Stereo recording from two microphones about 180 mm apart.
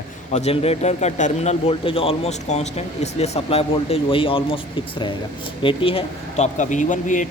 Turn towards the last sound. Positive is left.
turn(degrees=45)  # may be behind; listen again after turning